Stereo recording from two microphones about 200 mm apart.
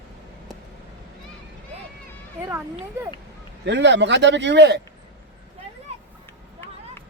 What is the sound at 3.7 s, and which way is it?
Speech, 60° right (ahead or behind).